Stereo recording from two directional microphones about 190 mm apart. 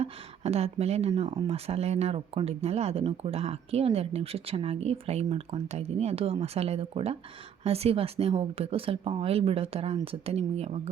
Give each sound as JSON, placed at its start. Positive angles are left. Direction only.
{"t": 0.0, "sound": "speech", "side_deg": -35}